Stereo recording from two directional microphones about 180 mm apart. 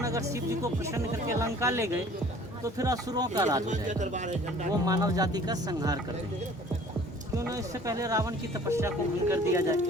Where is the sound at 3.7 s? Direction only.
40° right (ahead or behind).